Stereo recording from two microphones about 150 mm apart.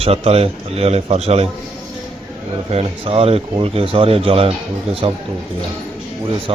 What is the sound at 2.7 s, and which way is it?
Speech, 40° right (ahead or behind).